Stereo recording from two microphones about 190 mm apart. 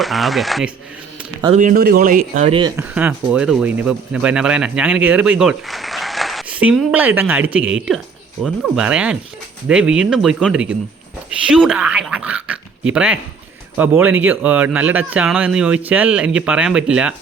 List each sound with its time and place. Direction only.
0.0 s speech: centre (ahead or behind)
1.5 s speech: 45° right (ahead or behind); by 2.8 s 25° right (ahead or behind)
2.9 s speech: 5° right (ahead or behind)